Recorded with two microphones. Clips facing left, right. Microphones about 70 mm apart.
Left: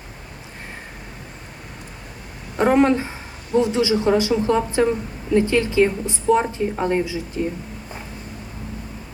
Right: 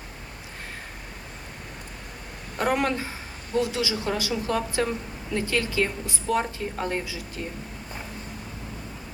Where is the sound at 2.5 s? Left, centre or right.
Left.